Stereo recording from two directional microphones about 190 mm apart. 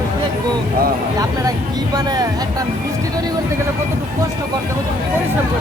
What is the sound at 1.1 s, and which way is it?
Speech, 20° right (ahead or behind).